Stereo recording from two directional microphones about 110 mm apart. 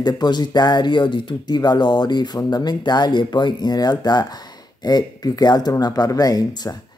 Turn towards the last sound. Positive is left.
turn(degrees=35)  # may be behind; listen again after turning